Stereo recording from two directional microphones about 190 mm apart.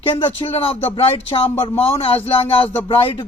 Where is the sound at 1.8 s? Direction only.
30° left (ahead or behind).